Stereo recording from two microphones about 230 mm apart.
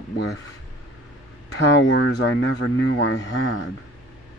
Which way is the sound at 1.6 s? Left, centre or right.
Left.